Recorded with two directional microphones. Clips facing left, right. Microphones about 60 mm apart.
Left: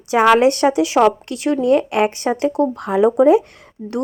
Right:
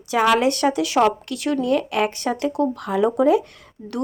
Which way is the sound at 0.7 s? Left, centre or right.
Left.